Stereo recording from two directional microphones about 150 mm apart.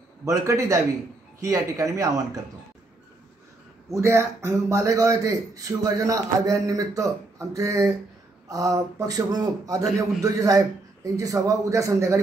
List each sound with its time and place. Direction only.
0.2 s a man's voice: 20° right (ahead or behind)
3.9 s a man's voice: 20° right (ahead or behind)